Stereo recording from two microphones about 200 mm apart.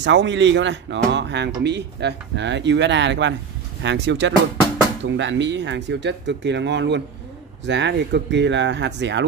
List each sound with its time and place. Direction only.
0.0 s speech: 60° right (ahead or behind)